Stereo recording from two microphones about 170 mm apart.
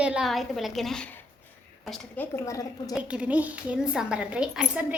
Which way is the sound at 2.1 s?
15° left (ahead or behind).